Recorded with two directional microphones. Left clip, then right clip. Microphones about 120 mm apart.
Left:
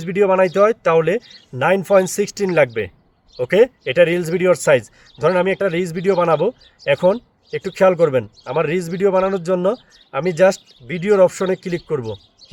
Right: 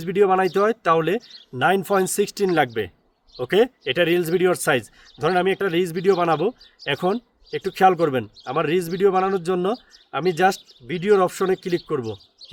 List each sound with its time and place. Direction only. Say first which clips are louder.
0.0 s speech: left 3 dB; 25° right (ahead or behind)